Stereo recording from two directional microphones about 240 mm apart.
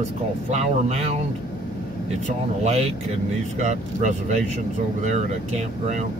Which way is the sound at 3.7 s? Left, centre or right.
Right.